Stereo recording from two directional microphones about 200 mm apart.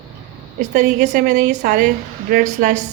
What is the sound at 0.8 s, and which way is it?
Speech, 50° right (ahead or behind).